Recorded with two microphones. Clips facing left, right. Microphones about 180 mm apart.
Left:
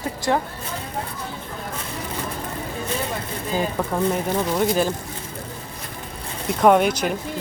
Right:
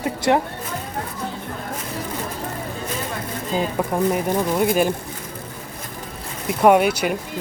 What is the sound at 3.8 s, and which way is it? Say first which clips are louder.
Speech: right 4 dB; 10° right (ahead or behind).